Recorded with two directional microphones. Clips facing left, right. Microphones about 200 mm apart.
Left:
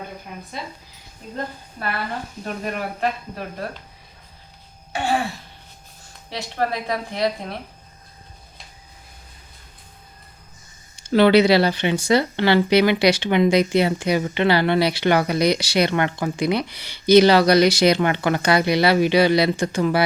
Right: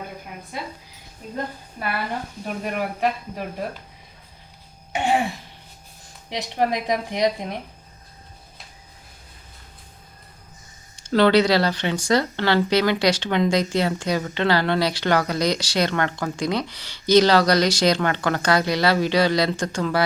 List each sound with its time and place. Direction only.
0.5 s speech: 10° right (ahead or behind)
2.4 s speech: 10° right (ahead or behind)
4.9 s throat clearing: 20° right (ahead or behind)
6.3 s speech: 15° right (ahead or behind)
11.1 s speech: 10° left (ahead or behind)